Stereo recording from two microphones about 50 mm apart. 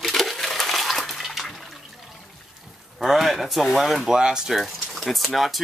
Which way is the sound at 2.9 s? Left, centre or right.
Centre.